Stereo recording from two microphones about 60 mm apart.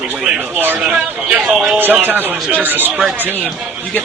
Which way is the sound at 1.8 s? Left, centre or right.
Right.